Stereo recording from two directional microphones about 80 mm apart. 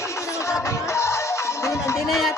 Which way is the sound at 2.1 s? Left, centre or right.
Centre.